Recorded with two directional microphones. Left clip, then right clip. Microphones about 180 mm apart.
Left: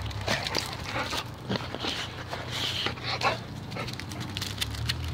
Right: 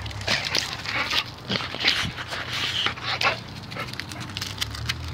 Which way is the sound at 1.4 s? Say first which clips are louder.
Right 8 dB; 10° right (ahead or behind).